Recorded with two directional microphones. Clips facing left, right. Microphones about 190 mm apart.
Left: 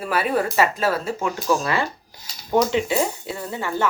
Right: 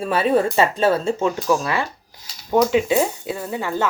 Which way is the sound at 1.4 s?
15° right (ahead or behind).